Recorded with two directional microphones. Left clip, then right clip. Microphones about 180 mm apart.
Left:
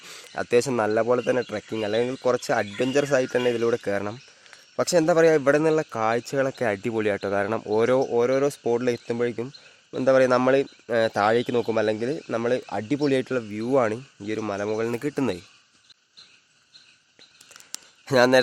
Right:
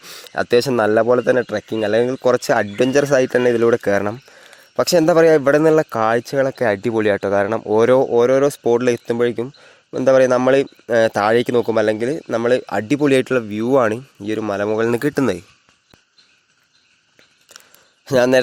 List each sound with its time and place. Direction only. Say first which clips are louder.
0.0 s speech: right 9 dB; 25° right (ahead or behind)
6.2 s speech: right 7 dB; 20° right (ahead or behind)
14.8 s speech: right 9 dB; 45° right (ahead or behind)
18.0 s speech: right 4 dB; 20° right (ahead or behind)